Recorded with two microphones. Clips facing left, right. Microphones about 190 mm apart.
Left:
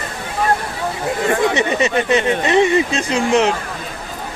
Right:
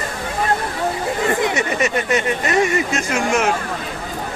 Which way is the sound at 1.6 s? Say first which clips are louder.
Left 3 dB; 20° left (ahead or behind).